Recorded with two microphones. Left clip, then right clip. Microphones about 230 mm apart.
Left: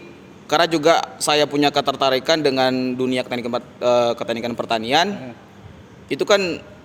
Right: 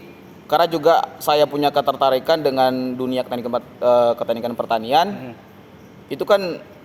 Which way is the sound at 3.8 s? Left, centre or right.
Left.